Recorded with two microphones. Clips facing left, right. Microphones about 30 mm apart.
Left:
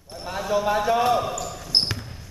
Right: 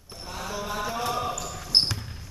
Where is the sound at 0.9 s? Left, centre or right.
Centre.